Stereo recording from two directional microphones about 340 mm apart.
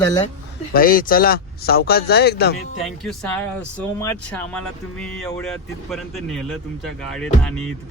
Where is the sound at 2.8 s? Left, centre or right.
Centre.